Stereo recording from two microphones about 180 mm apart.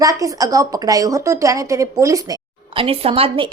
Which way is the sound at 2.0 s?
20° right (ahead or behind).